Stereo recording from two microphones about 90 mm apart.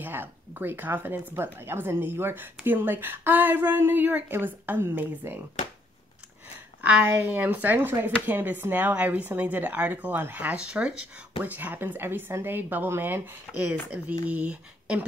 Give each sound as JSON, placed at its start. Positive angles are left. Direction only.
{"t": 0.0, "sound": "speech", "side_deg": -25}
{"t": 6.8, "sound": "speech", "side_deg": -15}